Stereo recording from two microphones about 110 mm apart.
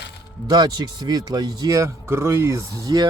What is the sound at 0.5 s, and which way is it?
Speech, 40° right (ahead or behind).